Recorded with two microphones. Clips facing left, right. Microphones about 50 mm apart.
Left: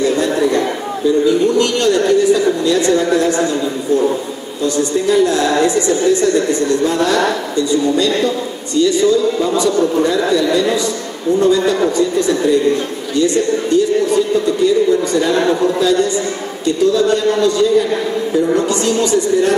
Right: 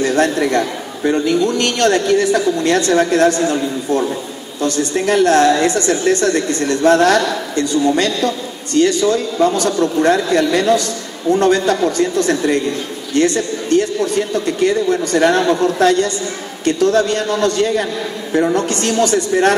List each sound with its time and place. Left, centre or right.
0.0 s a man's voice: right
4.6 s a woman's voice: right